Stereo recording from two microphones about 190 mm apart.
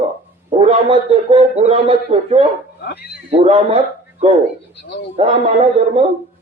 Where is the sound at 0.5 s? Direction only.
35° right (ahead or behind).